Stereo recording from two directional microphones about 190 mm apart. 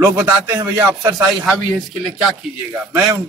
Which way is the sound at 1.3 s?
Centre (ahead or behind).